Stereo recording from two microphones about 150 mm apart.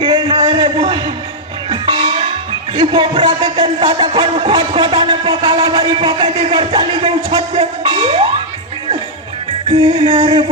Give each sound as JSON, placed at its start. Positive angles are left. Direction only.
{"t": 0.0, "sound": "a sound", "side_deg": -30}
{"t": 1.7, "sound": "music", "side_deg": -35}
{"t": 9.9, "sound": "music", "side_deg": -30}